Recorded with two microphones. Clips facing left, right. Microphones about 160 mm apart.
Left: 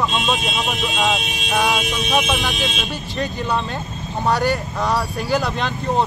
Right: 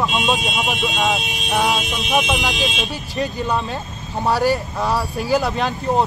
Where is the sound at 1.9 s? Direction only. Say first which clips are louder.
Even; 20° right (ahead or behind).